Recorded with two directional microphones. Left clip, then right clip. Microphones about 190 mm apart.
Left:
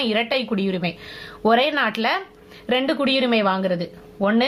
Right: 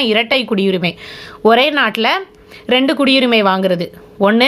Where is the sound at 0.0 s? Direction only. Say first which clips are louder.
Right 8 dB; 25° right (ahead or behind).